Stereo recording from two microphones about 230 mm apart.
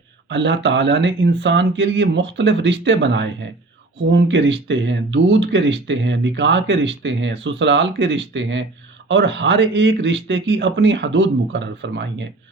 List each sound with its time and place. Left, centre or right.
0.3 s speech: right